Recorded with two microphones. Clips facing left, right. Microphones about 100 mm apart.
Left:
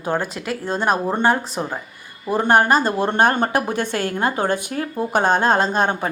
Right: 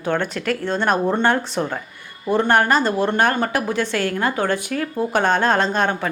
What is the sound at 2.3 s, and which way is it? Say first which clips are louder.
Speech: left 1 dB; 15° left (ahead or behind).